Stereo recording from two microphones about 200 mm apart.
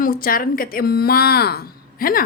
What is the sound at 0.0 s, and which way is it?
A woman's voice, 45° left (ahead or behind).